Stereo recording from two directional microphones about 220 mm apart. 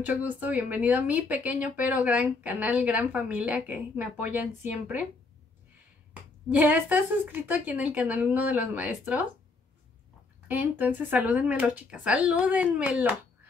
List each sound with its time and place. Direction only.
0.0 s a woman's voice: 5° right (ahead or behind)
6.5 s a woman's voice: 5° right (ahead or behind)
10.5 s a woman's voice: 10° right (ahead or behind)